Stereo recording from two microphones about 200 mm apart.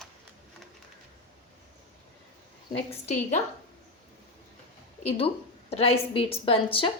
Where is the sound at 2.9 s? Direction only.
35° left (ahead or behind).